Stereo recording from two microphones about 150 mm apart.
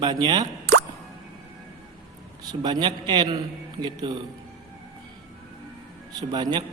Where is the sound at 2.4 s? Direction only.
25° right (ahead or behind).